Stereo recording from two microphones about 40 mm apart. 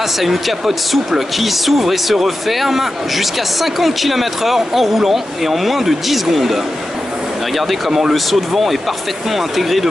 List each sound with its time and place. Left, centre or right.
0.2 s speech: centre